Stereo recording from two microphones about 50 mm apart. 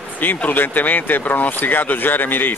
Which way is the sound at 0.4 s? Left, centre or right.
Left.